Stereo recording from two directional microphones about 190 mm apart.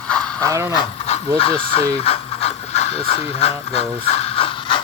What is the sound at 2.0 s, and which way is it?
Pant, 30° left (ahead or behind).